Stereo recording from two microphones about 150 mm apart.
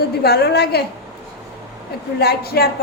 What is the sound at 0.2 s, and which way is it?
Speech, 90° left.